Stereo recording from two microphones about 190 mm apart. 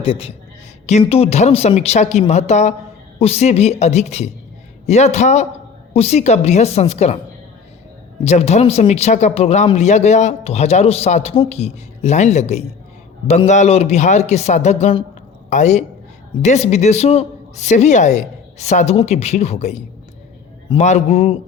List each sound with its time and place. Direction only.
0.0 s a woman's voice: 30° left (ahead or behind)
8.2 s a woman's voice: 35° left (ahead or behind)